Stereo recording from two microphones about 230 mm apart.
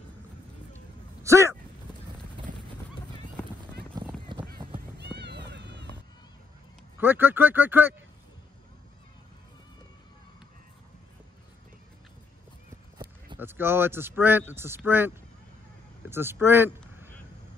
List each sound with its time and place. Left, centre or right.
1.2 s speech: centre
2.4 s clip-clop: right
3.8 s a sound: right
7.0 s speech: centre
13.4 s speech: centre